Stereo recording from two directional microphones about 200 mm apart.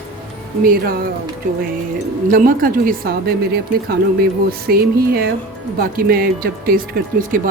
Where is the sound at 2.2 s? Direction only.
45° right (ahead or behind).